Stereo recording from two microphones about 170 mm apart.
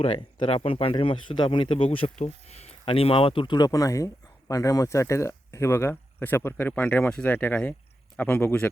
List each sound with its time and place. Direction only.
0.0 s speech: 30° left (ahead or behind); by 8.7 s 10° left (ahead or behind)